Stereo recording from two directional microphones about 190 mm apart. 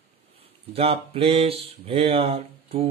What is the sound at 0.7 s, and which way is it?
Mantra, 30° right (ahead or behind).